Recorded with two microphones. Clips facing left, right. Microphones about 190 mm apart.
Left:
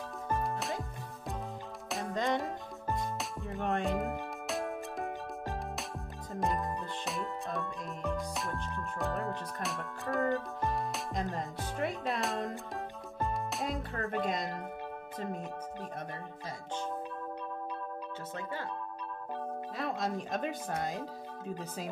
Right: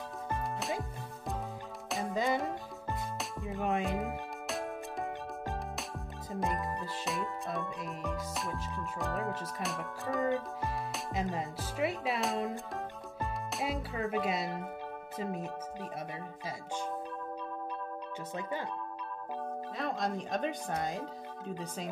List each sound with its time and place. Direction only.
0.3 s music: centre (ahead or behind)
1.9 s music: centre (ahead or behind)
6.3 s music: centre (ahead or behind)
15.1 s speech: 5° right (ahead or behind)
18.3 s speech: 15° right (ahead or behind)
19.8 s speech: centre (ahead or behind)